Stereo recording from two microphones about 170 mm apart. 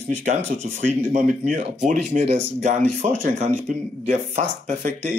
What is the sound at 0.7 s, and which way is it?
Speech, 50° right (ahead or behind).